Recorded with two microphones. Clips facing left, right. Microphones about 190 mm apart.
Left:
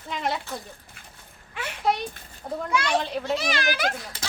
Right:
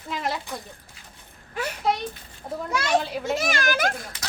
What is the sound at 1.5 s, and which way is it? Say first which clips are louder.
Speech: right 5 dB; 40° right (ahead or behind).